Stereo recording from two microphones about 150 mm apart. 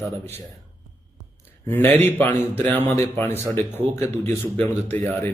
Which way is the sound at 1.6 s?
15° left (ahead or behind).